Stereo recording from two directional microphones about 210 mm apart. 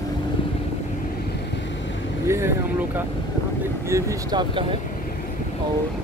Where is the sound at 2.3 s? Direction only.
10° right (ahead or behind).